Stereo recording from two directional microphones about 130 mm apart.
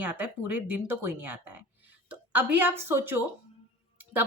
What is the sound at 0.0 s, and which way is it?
Speech, 15° right (ahead or behind).